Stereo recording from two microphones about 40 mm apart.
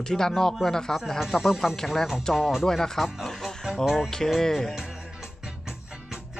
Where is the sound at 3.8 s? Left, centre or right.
Centre.